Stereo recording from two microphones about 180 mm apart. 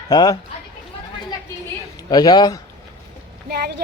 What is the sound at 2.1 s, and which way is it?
Speech, 25° left (ahead or behind).